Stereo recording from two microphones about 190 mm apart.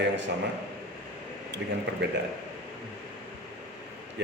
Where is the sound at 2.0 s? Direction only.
65° right (ahead or behind).